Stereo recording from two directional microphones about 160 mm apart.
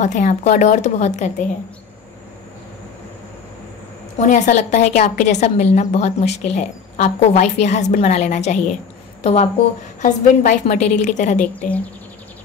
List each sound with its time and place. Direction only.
0.0 s a woman's voice: 50° left (ahead or behind)
4.2 s a woman's voice: 50° left (ahead or behind)